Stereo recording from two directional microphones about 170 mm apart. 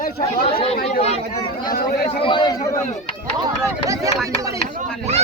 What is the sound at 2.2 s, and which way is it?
Speech, 30° left (ahead or behind).